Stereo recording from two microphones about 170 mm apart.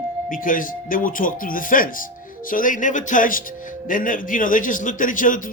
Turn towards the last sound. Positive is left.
turn(degrees=50)  # may be behind; listen again after turning